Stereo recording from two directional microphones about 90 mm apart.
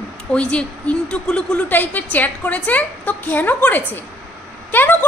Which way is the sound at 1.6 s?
20° left (ahead or behind).